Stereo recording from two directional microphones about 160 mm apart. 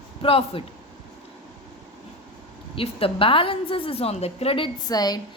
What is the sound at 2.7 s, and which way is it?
A woman's voice, 35° left (ahead or behind).